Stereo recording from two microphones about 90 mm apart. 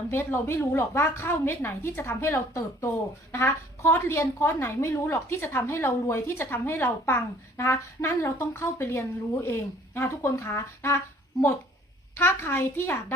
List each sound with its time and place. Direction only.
0.1 s a woman's voice: 25° left (ahead or behind)
12.1 s a woman's voice: 25° left (ahead or behind)